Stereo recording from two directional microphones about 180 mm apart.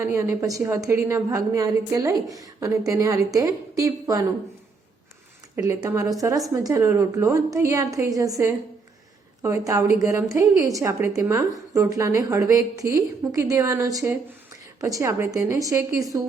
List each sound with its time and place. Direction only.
0.0 s a woman's voice: 15° right (ahead or behind)
5.5 s a woman's voice: 15° right (ahead or behind)